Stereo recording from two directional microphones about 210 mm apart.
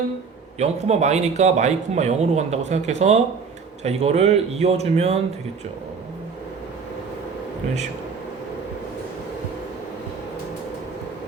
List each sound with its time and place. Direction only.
0.6 s speech: 30° right (ahead or behind)